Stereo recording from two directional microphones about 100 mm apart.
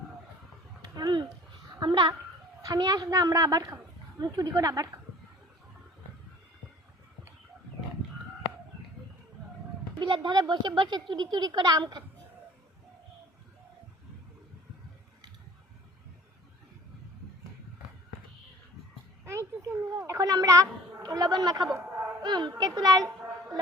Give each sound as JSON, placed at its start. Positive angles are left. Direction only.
{"t": 0.8, "sound": "a sound", "side_deg": -40}
{"t": 2.6, "sound": "a woman's voice", "side_deg": -40}
{"t": 10.0, "sound": "speech", "side_deg": -50}
{"t": 19.2, "sound": "a child's voice", "side_deg": -30}